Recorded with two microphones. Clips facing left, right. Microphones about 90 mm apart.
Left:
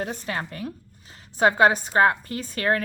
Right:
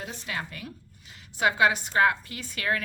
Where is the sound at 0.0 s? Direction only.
45° left (ahead or behind).